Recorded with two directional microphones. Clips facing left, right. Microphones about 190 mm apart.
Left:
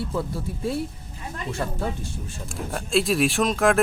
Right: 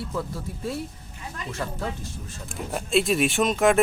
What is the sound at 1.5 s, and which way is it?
Speech, 30° left (ahead or behind).